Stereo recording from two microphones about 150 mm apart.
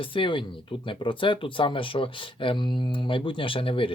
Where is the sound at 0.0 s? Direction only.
35° left (ahead or behind).